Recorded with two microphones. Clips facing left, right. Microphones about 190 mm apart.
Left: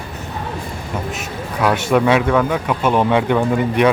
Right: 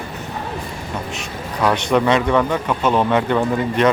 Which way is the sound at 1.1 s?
5° left (ahead or behind).